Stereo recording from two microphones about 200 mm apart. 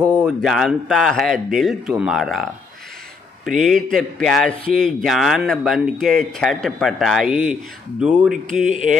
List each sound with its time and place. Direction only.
0.4 s speech: centre (ahead or behind)
3.4 s speech: centre (ahead or behind)
8.5 s speech: 40° right (ahead or behind)